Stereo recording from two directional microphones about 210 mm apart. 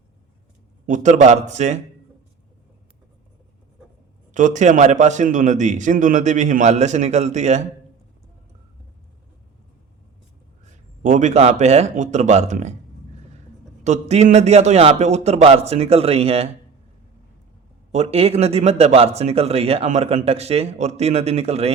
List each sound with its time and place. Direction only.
0.9 s a man's voice: 35° right (ahead or behind)
4.4 s a man's voice: 35° right (ahead or behind)
11.0 s a man's voice: 35° right (ahead or behind)
13.8 s a man's voice: 35° right (ahead or behind)
17.9 s speech: 30° right (ahead or behind)